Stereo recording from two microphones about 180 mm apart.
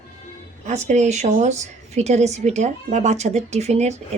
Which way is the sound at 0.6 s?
40° right (ahead or behind).